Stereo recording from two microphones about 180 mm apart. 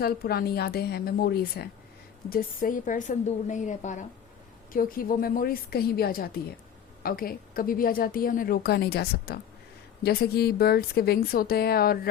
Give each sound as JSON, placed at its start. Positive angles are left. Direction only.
{"t": 0.0, "sound": "a woman's voice", "side_deg": 60}
{"t": 2.3, "sound": "a woman's voice", "side_deg": 50}